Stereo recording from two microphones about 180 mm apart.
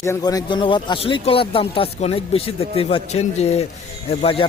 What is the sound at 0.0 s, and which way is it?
Speech, 15° left (ahead or behind).